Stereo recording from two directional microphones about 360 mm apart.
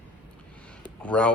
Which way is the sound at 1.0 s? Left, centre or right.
Centre.